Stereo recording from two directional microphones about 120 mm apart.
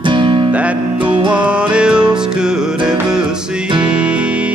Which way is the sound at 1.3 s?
10° right (ahead or behind).